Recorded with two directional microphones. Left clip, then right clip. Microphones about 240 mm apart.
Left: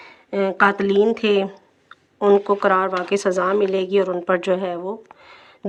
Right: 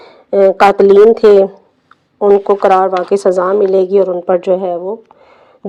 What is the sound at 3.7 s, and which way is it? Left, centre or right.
A woman's voice, centre.